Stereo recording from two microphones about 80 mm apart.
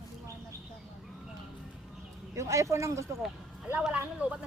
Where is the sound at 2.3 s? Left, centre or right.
Right.